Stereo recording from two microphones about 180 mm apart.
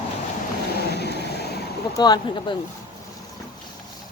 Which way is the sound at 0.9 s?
65° left (ahead or behind).